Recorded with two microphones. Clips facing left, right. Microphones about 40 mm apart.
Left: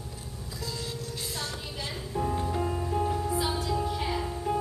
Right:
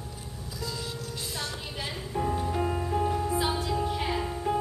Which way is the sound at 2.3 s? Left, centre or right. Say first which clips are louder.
Right 1 dB; centre.